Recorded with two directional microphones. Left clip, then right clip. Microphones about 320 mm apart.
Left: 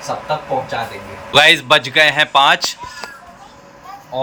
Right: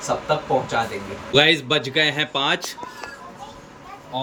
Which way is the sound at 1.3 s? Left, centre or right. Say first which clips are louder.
Left 7 dB; centre.